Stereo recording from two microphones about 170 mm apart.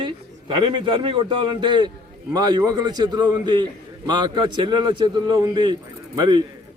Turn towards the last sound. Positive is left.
turn(degrees=-25)  # may be behind; listen again after turning